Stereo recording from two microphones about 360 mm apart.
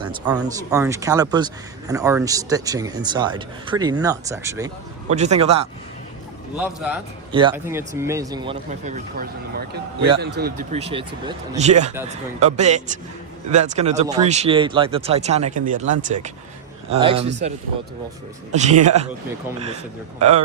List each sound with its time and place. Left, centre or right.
0.0 s a man's voice: centre
6.6 s a man's voice: centre
18.5 s a man's voice: centre